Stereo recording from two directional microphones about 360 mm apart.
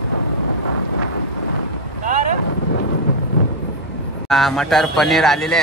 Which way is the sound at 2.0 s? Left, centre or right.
Right.